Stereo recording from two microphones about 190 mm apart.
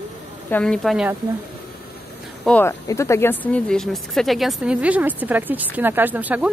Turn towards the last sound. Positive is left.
turn(degrees=-10)  # may be behind; listen again after turning